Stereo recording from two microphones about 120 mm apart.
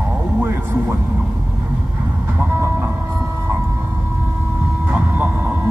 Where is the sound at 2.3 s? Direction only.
20° right (ahead or behind).